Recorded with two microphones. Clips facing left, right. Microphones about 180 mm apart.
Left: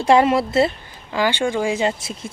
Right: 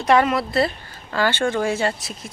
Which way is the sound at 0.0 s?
25° left (ahead or behind).